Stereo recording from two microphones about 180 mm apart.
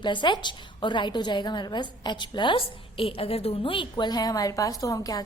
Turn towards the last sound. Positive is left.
turn(degrees=20)  # may be behind; listen again after turning